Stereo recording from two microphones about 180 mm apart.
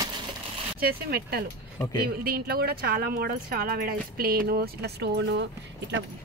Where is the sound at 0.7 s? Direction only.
60° right (ahead or behind).